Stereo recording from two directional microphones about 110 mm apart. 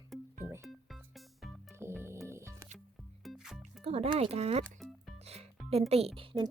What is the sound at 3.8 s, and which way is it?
Speech, 75° right (ahead or behind).